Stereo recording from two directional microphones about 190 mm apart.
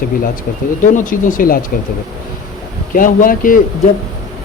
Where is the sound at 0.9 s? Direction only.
45° left (ahead or behind).